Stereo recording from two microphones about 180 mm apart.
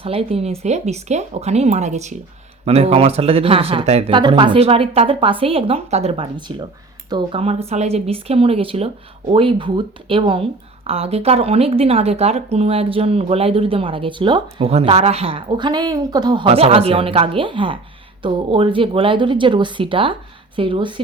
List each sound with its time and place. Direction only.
0.0 s speech: 35° right (ahead or behind)